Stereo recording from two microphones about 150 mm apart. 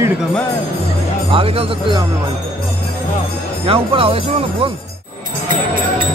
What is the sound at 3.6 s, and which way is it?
Speech, 40° right (ahead or behind).